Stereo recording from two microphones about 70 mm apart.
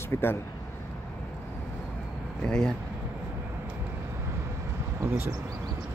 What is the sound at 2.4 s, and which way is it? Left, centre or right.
Speech, centre.